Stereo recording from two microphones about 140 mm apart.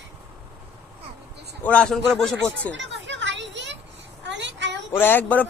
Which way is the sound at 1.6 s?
10° left (ahead or behind).